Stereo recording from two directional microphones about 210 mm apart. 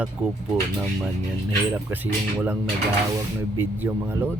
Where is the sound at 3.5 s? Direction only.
10° right (ahead or behind).